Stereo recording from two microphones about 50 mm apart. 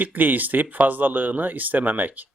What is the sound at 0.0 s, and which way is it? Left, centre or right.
Speech, right.